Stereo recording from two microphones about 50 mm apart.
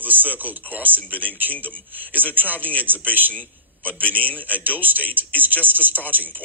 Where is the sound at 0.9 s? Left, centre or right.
Left.